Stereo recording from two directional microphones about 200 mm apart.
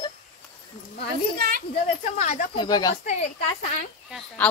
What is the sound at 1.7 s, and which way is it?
Speech, 40° left (ahead or behind).